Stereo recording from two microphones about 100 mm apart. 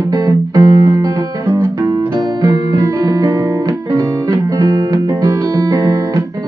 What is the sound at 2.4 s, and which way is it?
Music, 40° right (ahead or behind).